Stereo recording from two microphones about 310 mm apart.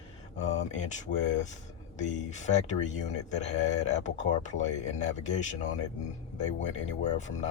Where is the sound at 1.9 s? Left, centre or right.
Left.